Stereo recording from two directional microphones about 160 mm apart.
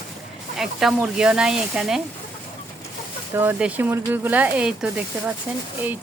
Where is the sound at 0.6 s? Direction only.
5° right (ahead or behind).